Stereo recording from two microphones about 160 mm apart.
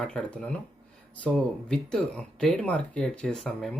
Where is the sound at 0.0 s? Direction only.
5° left (ahead or behind).